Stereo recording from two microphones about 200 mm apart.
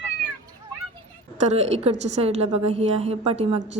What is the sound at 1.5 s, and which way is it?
Speech, 35° right (ahead or behind).